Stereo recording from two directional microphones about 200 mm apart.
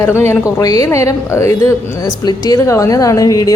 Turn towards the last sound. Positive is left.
turn(degrees=15)  # may be behind; listen again after turning